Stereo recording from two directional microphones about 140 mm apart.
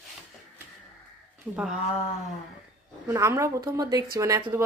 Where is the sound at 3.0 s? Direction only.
20° right (ahead or behind).